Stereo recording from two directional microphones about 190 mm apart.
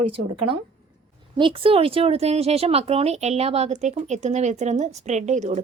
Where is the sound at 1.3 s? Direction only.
25° right (ahead or behind).